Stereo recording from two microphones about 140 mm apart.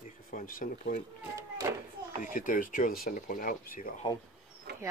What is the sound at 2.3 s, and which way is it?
Speech, 70° left (ahead or behind).